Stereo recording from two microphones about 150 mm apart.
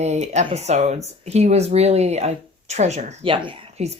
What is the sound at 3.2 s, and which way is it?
Speech, 35° right (ahead or behind).